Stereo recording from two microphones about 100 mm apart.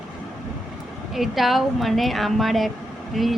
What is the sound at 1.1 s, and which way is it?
A woman's voice, centre (ahead or behind).